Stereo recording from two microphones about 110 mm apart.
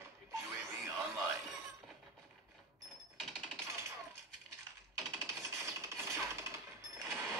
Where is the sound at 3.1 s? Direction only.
Centre (ahead or behind).